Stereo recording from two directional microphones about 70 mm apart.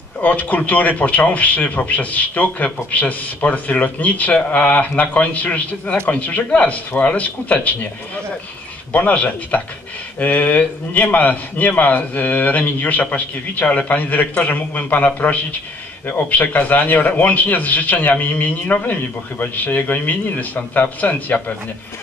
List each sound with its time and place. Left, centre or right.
0.2 s a man's voice: left
8.9 s a man's voice: left